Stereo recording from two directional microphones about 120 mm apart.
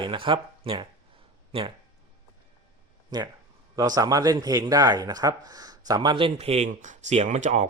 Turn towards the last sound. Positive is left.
turn(degrees=-80)